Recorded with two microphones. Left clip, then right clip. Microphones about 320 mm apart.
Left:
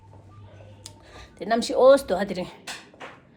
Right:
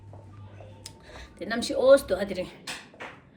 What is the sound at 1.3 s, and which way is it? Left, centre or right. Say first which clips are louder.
Speech: left 6 dB; centre.